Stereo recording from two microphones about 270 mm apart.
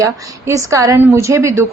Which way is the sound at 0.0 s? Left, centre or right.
Centre.